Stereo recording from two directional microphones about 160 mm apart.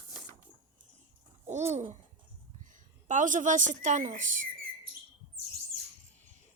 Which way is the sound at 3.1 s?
50° right (ahead or behind).